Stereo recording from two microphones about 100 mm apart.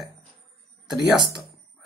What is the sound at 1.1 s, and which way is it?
Speech, 50° right (ahead or behind).